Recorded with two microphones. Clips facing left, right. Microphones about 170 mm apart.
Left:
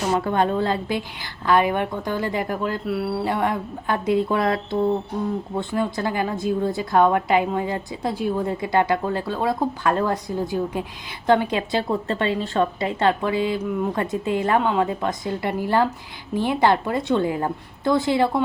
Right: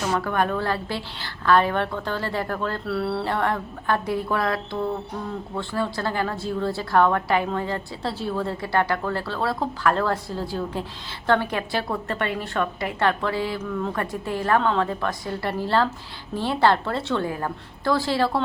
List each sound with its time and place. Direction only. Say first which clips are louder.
0.1 s a woman's voice: left 4 dB; 20° left (ahead or behind)